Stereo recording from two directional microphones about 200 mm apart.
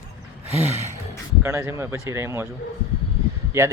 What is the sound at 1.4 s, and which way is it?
Speech, 15° right (ahead or behind).